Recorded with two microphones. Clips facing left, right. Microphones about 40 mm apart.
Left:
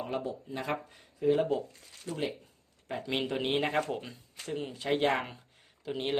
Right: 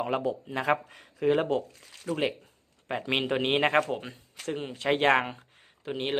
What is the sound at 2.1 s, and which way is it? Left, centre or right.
Speech, right.